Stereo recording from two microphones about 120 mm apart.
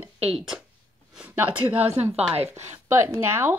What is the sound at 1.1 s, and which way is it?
A woman's voice, 10° right (ahead or behind).